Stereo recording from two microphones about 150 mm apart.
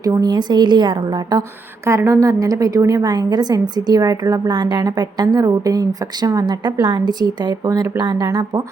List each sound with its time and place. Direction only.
0.0 s a woman's voice: 25° right (ahead or behind)
1.9 s a woman's voice: 20° right (ahead or behind)